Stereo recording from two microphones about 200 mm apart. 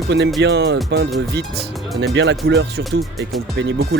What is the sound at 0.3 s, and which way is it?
Speech, 60° right (ahead or behind).